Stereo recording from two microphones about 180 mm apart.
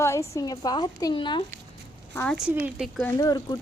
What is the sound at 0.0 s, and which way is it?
Speech, 15° left (ahead or behind).